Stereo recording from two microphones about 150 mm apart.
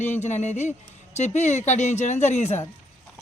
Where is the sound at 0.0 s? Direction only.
50° left (ahead or behind).